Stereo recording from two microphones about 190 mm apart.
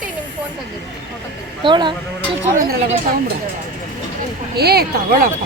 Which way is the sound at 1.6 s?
25° right (ahead or behind).